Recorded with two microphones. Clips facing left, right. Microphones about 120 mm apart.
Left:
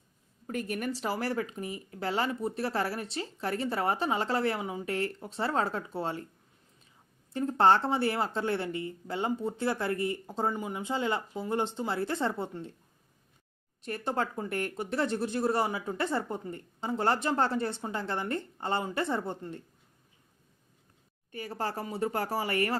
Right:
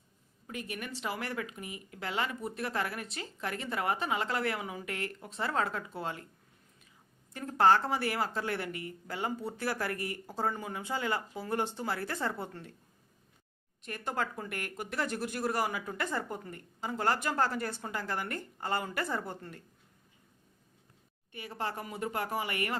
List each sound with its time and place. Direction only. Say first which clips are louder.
0.4 s speech: left 7 dB; 40° left (ahead or behind)
7.3 s speech: left 2 dB; 25° left (ahead or behind)
13.8 s speech: left 4 dB; 30° left (ahead or behind)
21.3 s speech: left 3 dB; 40° left (ahead or behind)